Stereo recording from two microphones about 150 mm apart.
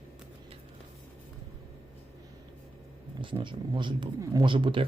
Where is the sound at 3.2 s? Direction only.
35° right (ahead or behind).